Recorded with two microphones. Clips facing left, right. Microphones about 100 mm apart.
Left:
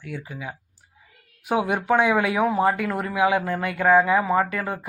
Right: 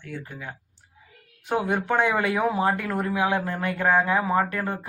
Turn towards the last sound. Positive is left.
turn(degrees=0)  # may be behind; listen again after turning